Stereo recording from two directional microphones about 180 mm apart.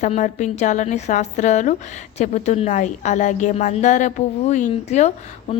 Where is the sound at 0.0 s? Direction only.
40° left (ahead or behind).